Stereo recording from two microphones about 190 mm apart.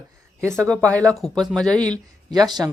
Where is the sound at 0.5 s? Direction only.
5° left (ahead or behind).